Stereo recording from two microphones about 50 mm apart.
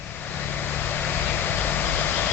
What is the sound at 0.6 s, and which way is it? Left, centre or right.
Vehicle, left.